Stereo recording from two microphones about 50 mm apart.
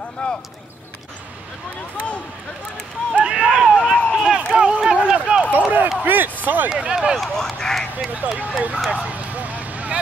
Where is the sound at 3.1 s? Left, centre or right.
Right.